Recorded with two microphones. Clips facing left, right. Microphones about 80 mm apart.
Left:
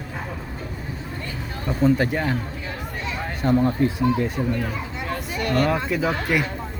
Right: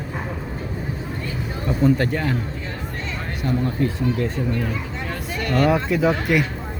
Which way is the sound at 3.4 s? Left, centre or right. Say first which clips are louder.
Left 4 dB; left.